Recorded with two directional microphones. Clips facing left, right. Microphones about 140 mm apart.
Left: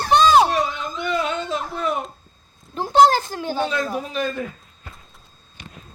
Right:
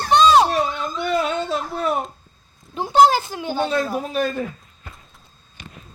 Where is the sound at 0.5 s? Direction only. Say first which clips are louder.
Right 1 dB; 45° right (ahead or behind).